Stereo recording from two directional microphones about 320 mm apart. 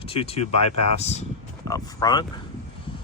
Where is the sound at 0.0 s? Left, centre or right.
Centre.